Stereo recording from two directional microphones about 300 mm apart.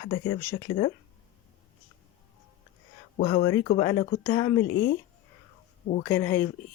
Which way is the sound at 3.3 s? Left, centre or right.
Centre.